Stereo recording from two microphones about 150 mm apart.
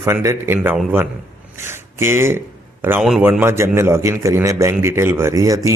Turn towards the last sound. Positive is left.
turn(degrees=-20)  # may be behind; listen again after turning